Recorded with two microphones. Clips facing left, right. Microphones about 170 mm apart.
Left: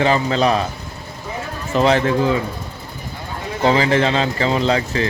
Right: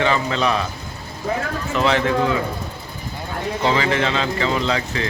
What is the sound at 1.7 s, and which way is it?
Speech, 35° left (ahead or behind).